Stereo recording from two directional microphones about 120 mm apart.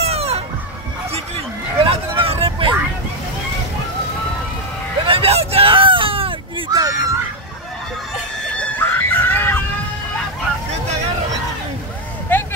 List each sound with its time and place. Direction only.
0.0 s music: 60° right (ahead or behind)
1.8 s vehicle: 50° right (ahead or behind)
5.0 s hubbub: 50° right (ahead or behind)
6.7 s honk: 30° right (ahead or behind)
8.5 s screaming: 15° left (ahead or behind)
12.3 s vehicle: 15° left (ahead or behind)